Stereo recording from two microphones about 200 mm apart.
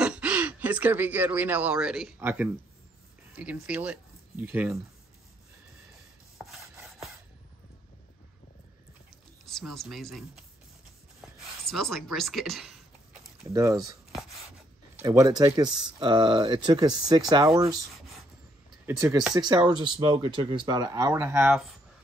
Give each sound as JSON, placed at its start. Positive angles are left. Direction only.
{"t": 0.0, "sound": "speech", "side_deg": -5}
{"t": 9.5, "sound": "speech", "side_deg": 0}
{"t": 11.1, "sound": "a sound", "side_deg": 0}
{"t": 13.5, "sound": "speech", "side_deg": -15}
{"t": 15.0, "sound": "speech", "side_deg": -15}
{"t": 18.9, "sound": "speech", "side_deg": -15}